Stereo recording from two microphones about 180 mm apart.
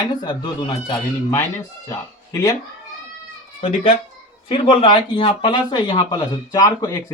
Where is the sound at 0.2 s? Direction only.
25° left (ahead or behind).